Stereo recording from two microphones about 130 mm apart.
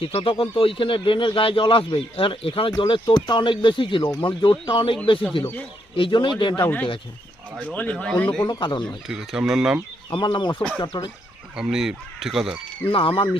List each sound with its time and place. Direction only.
0.0 s speech: 45° left (ahead or behind)
5.4 s speech: 15° left (ahead or behind)
6.0 s speech: 40° left (ahead or behind)
7.7 s speech: 10° left (ahead or behind)
8.4 s speech: 30° left (ahead or behind)
8.8 s speech: 5° right (ahead or behind)
10.1 s speech: 40° left (ahead or behind)
11.5 s speech: 5° right (ahead or behind)
12.9 s speech: 40° left (ahead or behind)